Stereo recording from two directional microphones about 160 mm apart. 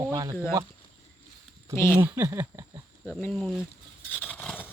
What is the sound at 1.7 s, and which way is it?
Speech, 15° left (ahead or behind).